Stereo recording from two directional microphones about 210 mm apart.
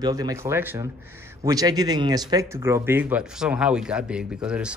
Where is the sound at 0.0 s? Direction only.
20° right (ahead or behind).